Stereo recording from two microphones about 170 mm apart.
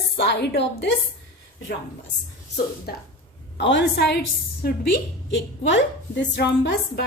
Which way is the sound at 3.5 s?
90° left.